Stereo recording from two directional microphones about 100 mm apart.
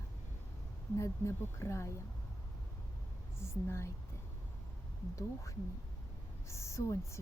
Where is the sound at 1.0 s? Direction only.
30° left (ahead or behind).